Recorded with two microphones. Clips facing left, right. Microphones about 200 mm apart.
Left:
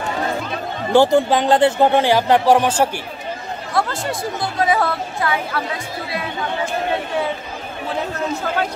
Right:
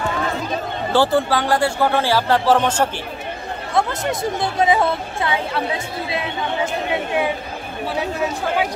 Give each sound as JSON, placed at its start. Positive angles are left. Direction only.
{"t": 0.9, "sound": "speech", "side_deg": 15}
{"t": 3.7, "sound": "speech", "side_deg": -20}